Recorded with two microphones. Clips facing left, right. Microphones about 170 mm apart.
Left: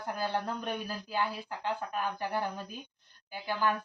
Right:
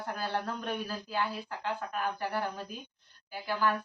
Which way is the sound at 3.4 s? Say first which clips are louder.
Right 1 dB; 15° left (ahead or behind).